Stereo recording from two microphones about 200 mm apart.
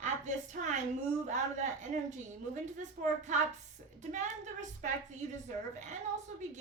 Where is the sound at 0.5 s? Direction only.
40° right (ahead or behind).